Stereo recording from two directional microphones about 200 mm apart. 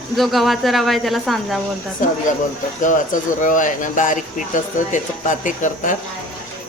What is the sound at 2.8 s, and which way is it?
Speech, 40° left (ahead or behind).